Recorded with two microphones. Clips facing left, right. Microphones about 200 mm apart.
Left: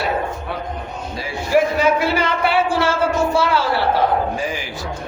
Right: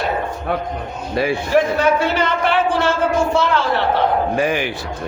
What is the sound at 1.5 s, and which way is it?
Speech, 10° left (ahead or behind).